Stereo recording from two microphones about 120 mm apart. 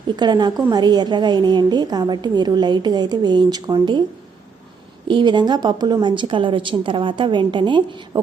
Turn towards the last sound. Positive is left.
turn(degrees=-40)  # may be behind; listen again after turning